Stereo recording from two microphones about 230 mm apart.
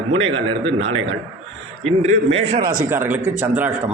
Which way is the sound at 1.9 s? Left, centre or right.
Right.